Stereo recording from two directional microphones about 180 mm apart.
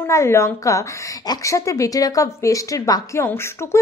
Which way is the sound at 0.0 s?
15° left (ahead or behind).